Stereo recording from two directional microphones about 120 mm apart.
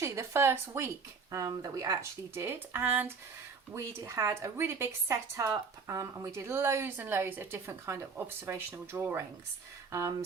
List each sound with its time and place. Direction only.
0.0 s speech: 25° right (ahead or behind)